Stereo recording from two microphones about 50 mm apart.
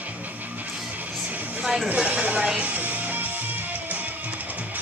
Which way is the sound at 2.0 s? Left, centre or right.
Right.